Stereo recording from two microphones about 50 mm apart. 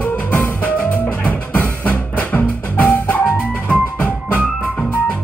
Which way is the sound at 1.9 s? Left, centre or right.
Left.